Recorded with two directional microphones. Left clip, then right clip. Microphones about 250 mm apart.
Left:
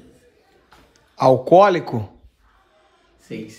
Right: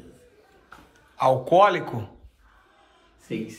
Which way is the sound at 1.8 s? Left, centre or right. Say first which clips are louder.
Left 5 dB; left.